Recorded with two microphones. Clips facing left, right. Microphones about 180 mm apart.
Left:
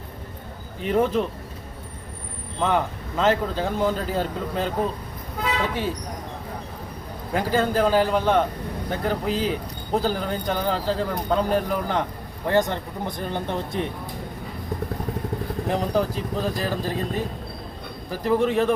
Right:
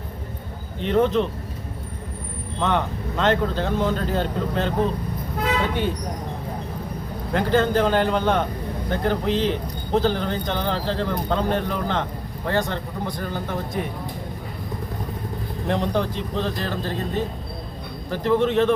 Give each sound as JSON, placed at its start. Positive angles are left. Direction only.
{"t": 0.8, "sound": "speech", "side_deg": 5}
{"t": 2.6, "sound": "speech", "side_deg": 5}
{"t": 7.3, "sound": "speech", "side_deg": 5}
{"t": 15.6, "sound": "speech", "side_deg": 5}